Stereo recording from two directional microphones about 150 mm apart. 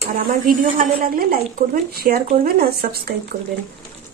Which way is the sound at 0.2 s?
70° right (ahead or behind).